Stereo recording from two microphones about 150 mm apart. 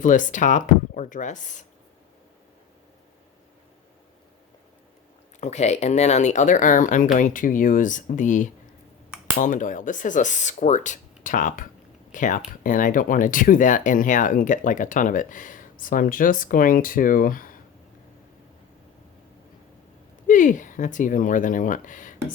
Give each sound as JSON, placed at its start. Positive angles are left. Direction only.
{"t": 0.0, "sound": "speech", "side_deg": 60}
{"t": 5.4, "sound": "speech", "side_deg": 50}
{"t": 9.0, "sound": "a sound", "side_deg": -10}
{"t": 9.4, "sound": "speech", "side_deg": 60}
{"t": 20.2, "sound": "speech", "side_deg": 60}